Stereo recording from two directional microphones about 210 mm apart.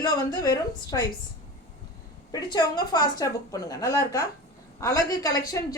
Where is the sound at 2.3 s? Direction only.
20° left (ahead or behind).